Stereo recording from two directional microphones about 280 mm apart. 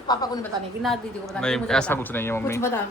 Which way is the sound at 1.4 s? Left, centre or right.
Centre.